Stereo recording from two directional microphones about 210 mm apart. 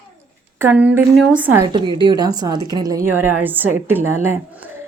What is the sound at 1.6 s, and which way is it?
A woman's voice, 20° right (ahead or behind).